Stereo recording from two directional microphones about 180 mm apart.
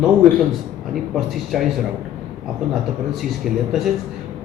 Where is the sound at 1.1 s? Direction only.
Centre (ahead or behind).